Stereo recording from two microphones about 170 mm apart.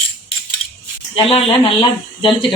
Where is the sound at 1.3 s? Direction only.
35° left (ahead or behind).